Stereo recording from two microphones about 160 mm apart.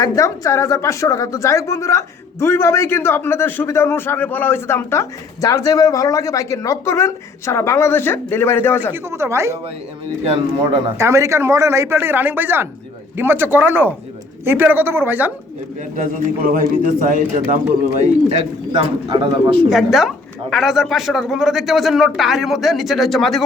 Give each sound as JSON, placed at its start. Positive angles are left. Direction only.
{"t": 0.0, "sound": "a woman's voice", "side_deg": 20}
{"t": 8.9, "sound": "a man's voice", "side_deg": -15}
{"t": 10.2, "sound": "speech", "side_deg": -35}
{"t": 10.9, "sound": "a man's voice", "side_deg": -20}
{"t": 16.5, "sound": "speech", "side_deg": -60}
{"t": 18.8, "sound": "speech", "side_deg": -30}
{"t": 19.5, "sound": "speech", "side_deg": 0}